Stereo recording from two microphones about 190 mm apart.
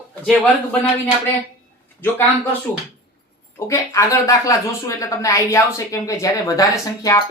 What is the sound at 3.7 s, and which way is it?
Speech, 15° left (ahead or behind).